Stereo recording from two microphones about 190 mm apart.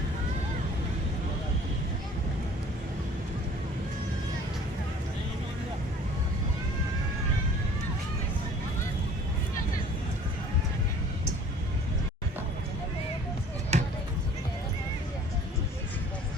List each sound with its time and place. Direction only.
13.7 s basketball bounce: 35° right (ahead or behind)